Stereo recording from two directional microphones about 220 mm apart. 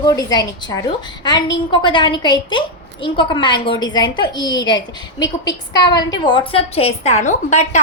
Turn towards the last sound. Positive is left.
turn(degrees=30)  # may be behind; listen again after turning